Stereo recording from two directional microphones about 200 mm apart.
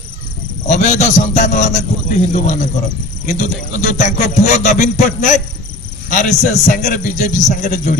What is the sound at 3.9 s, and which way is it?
A man's voice, 40° left (ahead or behind).